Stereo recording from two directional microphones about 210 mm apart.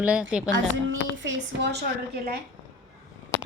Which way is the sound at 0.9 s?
60° right (ahead or behind).